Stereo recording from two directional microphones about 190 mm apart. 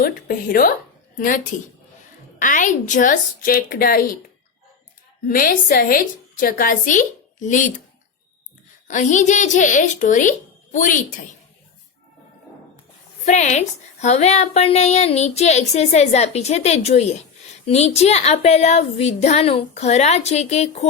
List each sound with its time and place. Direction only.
0.0 s a woman's voice: 50° left (ahead or behind)
5.3 s a woman's voice: 50° left (ahead or behind)
8.9 s a woman's voice: 40° left (ahead or behind)
13.2 s a woman's voice: 40° left (ahead or behind)